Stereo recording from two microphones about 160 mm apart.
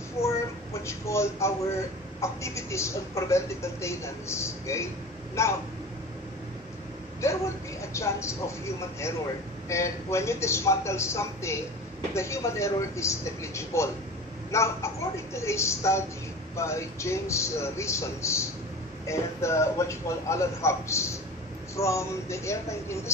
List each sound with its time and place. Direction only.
0.2 s a sound: 40° left (ahead or behind)
0.8 s speech: 20° left (ahead or behind)
7.2 s speech: 20° left (ahead or behind)